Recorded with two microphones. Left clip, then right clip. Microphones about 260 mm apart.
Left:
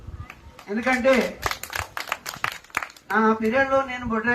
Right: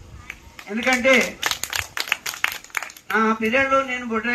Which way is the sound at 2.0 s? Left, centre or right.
Left.